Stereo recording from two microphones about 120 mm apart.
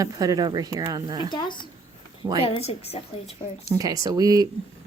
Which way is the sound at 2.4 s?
55° left (ahead or behind).